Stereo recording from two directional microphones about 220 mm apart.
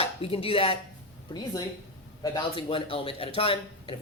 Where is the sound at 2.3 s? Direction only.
25° left (ahead or behind).